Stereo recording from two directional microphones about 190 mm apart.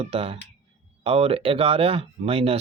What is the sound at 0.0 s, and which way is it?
Speech, 30° right (ahead or behind).